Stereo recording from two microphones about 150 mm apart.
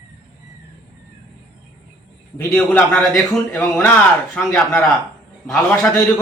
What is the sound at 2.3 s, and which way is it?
A man's voice, 15° left (ahead or behind).